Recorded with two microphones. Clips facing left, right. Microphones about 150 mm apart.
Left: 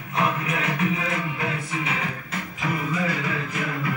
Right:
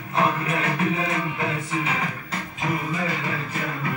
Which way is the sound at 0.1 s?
30° right (ahead or behind).